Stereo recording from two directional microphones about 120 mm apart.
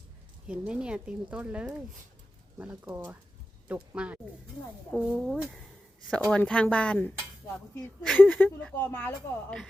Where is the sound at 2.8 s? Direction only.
20° right (ahead or behind).